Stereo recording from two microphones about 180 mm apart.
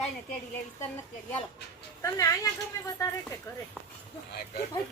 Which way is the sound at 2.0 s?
20° left (ahead or behind).